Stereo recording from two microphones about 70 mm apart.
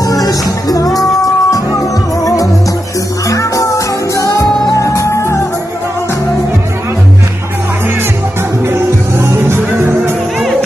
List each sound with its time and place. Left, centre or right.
0.0 s music: left
8.6 s music: right